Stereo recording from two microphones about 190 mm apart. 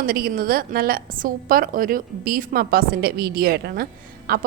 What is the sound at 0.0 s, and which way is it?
A woman's voice, 50° right (ahead or behind).